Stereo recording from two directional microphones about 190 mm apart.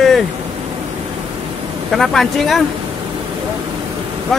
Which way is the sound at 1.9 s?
Centre (ahead or behind).